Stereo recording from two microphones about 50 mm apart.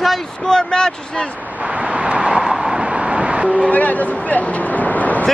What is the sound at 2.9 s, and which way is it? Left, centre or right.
Vehicle, right.